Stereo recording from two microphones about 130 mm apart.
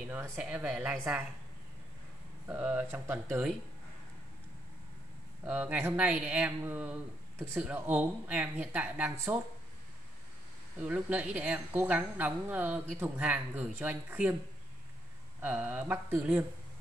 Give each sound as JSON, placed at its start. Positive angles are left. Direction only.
{"t": 0.0, "sound": "a woman's voice", "side_deg": -10}
{"t": 2.4, "sound": "a woman's voice", "side_deg": -15}
{"t": 5.4, "sound": "a woman's voice", "side_deg": -15}
{"t": 10.8, "sound": "a woman's voice", "side_deg": -10}
{"t": 15.4, "sound": "a woman's voice", "side_deg": -10}